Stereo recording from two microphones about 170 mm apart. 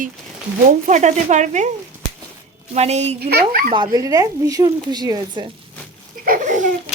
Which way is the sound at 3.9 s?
20° right (ahead or behind).